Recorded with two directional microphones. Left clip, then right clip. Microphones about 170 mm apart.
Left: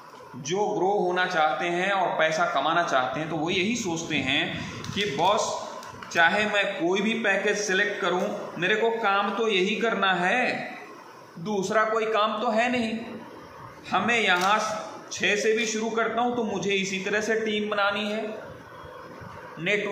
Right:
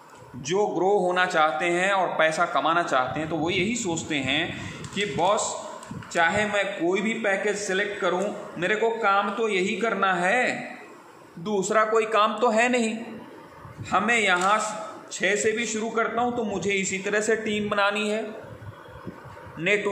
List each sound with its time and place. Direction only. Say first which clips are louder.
0.5 s a man's voice: right 2 dB; 65° right (ahead or behind)
19.6 s a man's voice: right 3 dB; 45° right (ahead or behind)